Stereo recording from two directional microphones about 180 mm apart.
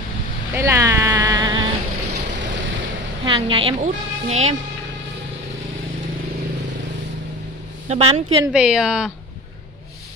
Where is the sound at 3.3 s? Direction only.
30° right (ahead or behind).